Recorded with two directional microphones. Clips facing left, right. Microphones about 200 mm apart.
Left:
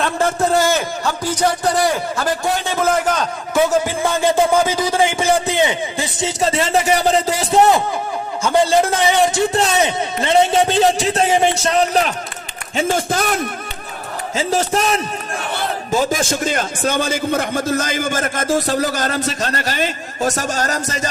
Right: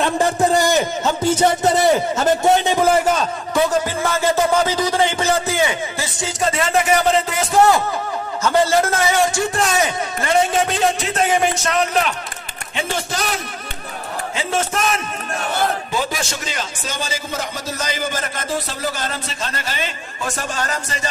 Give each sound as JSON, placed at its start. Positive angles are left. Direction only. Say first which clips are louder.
{"t": 0.0, "sound": "a man's voice", "louder": "right 1 dB", "side_deg": -15}
{"t": 3.2, "sound": "a man's voice", "louder": "left 1 dB", "side_deg": 5}
{"t": 7.5, "sound": "a man's voice", "louder": "left 1 dB", "side_deg": 20}
{"t": 12.7, "sound": "a man's voice", "louder": "left 6 dB", "side_deg": 50}
{"t": 14.3, "sound": "a man's voice", "louder": "left 5 dB", "side_deg": 35}
{"t": 15.9, "sound": "a man's voice", "louder": "left 6 dB", "side_deg": 45}